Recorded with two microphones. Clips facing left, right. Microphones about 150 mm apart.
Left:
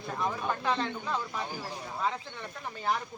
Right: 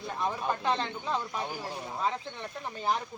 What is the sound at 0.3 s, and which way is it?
Speech, 30° right (ahead or behind).